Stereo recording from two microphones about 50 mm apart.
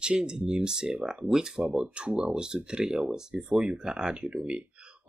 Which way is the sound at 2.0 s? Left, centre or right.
Right.